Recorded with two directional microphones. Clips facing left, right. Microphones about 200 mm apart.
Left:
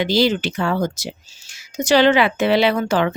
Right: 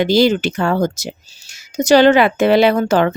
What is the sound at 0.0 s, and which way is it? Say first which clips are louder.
Speech: right 4 dB; 45° right (ahead or behind).